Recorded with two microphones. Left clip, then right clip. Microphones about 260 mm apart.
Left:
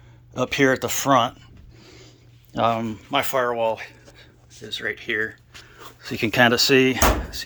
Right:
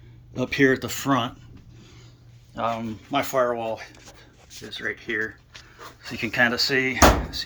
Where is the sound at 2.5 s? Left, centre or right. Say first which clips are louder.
Left 5 dB; left.